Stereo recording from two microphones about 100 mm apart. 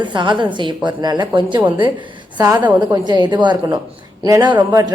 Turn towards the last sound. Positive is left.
turn(degrees=-45)  # may be behind; listen again after turning